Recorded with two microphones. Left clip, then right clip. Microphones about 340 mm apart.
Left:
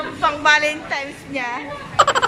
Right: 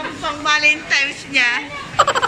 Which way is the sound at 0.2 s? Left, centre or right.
Left.